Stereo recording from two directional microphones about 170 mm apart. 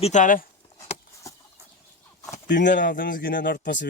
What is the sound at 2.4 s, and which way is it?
Speech, 90° left.